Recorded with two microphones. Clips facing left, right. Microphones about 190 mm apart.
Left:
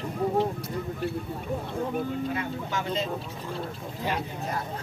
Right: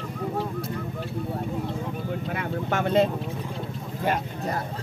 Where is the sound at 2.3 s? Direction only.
60° right (ahead or behind).